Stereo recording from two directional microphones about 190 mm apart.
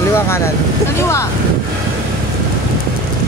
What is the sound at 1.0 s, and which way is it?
Speech, 15° left (ahead or behind).